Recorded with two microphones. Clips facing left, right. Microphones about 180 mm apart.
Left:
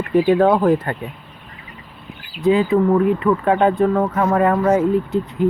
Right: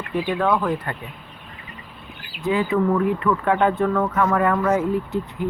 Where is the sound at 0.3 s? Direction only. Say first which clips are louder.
Left 6 dB; 35° left (ahead or behind).